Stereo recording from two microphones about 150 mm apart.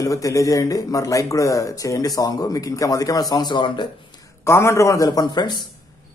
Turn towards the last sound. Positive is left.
turn(degrees=30)  # may be behind; listen again after turning